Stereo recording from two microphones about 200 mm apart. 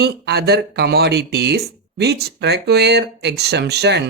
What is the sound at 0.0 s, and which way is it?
Speech, 55° right (ahead or behind).